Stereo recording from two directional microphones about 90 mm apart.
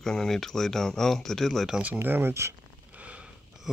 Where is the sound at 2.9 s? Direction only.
15° right (ahead or behind).